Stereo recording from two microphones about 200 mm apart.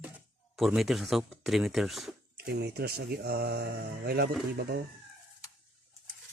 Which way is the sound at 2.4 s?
55° right (ahead or behind).